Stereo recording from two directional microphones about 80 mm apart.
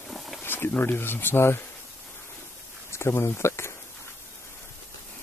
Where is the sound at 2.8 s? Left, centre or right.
Left.